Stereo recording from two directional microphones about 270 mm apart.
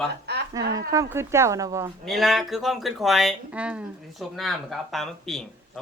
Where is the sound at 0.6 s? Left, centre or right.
Centre.